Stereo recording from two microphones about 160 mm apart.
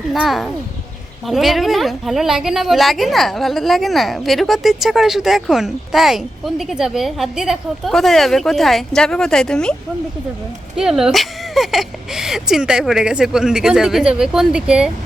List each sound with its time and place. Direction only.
0.1 s a woman's voice: centre (ahead or behind)
10.8 s a woman's voice: 5° right (ahead or behind)